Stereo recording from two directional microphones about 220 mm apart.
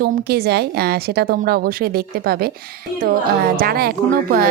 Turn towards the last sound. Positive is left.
turn(degrees=-45)  # may be behind; listen again after turning